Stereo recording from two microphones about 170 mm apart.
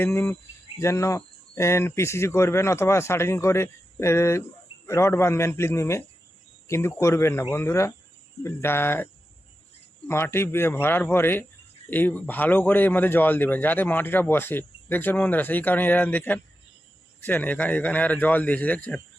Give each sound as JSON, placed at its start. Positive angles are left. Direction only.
{"t": 0.0, "sound": "a man's voice", "side_deg": 15}
{"t": 10.1, "sound": "a man's voice", "side_deg": 15}